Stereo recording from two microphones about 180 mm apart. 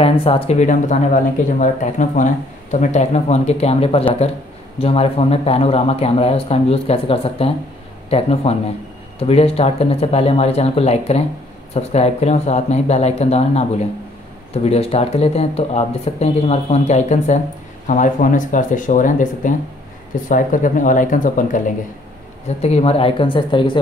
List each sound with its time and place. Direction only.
0.0 s speech: 30° left (ahead or behind); by 21.7 s 45° left (ahead or behind)
22.6 s speech: 35° left (ahead or behind)